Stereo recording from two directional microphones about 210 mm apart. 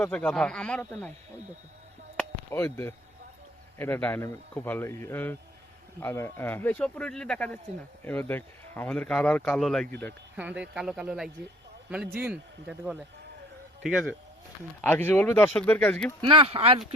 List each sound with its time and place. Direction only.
0.0 s speech: 5° left (ahead or behind)
2.1 s chop: 10° left (ahead or behind)
3.8 s speech: 10° left (ahead or behind)
10.3 s speech: 5° right (ahead or behind)
14.8 s speech: 10° left (ahead or behind)
16.2 s speech: 25° right (ahead or behind)